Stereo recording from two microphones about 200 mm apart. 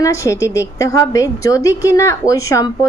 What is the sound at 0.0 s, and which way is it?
Speech, 15° left (ahead or behind).